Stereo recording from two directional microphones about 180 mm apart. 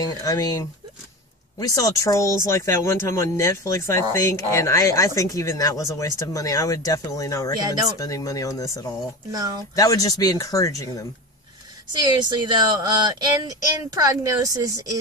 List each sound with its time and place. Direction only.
0.0 s speech: 20° left (ahead or behind)
11.9 s speech: 25° right (ahead or behind)